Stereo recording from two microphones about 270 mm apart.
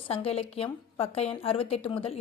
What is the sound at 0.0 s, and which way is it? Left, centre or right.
A woman's voice, left.